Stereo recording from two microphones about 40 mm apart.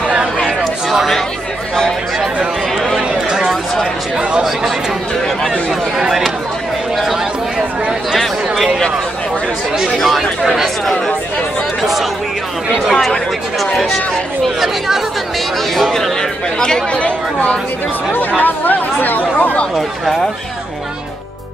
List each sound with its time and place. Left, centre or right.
0.8 s speech: centre
3.3 s a sound: centre
5.9 s a sound: centre
10.0 s speech: centre
12.9 s speech: centre
14.6 s speech: centre
15.7 s speech: centre
16.9 s speech: left
18.4 s speech: left
19.3 s speech: left